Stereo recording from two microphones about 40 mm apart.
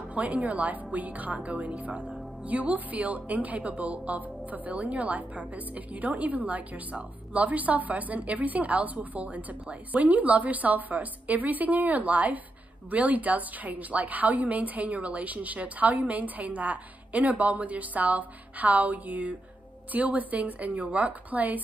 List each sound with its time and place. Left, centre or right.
0.1 s a woman's voice: right